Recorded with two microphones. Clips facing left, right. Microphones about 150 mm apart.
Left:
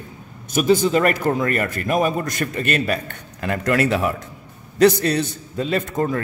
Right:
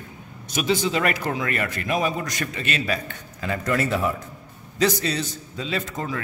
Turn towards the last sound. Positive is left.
turn(degrees=50)  # may be behind; listen again after turning